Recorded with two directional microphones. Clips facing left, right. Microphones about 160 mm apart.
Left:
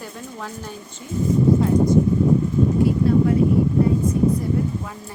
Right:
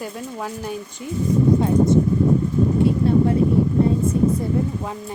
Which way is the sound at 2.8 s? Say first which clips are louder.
Right 1 dB; 25° right (ahead or behind).